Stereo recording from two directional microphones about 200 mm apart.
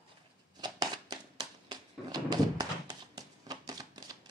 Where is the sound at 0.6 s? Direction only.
20° right (ahead or behind).